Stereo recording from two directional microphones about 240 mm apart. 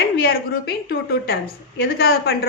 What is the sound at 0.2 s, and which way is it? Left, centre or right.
A woman's voice, left.